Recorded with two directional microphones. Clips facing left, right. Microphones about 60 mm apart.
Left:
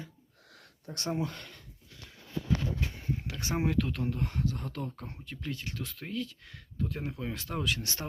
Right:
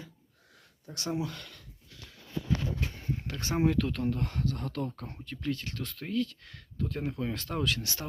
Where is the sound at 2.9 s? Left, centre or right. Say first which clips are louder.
Even; centre.